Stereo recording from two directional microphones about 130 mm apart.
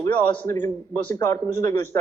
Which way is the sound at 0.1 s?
15° left (ahead or behind).